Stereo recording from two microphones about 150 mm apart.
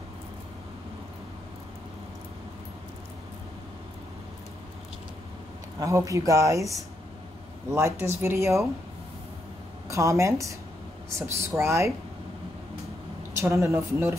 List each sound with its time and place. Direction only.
5.8 s speech: 20° right (ahead or behind)
9.8 s speech: 20° right (ahead or behind)
13.4 s speech: 20° right (ahead or behind)